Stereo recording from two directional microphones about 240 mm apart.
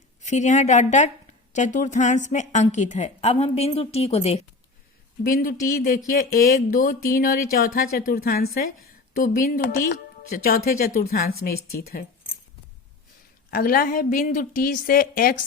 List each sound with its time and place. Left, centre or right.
0.2 s a woman's voice: left
5.2 s speech: left
13.5 s speech: left